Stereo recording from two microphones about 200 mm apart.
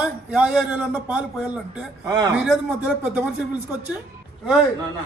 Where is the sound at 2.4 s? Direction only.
5° right (ahead or behind).